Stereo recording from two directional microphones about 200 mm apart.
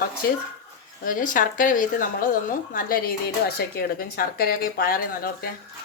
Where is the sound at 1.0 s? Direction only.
40° left (ahead or behind).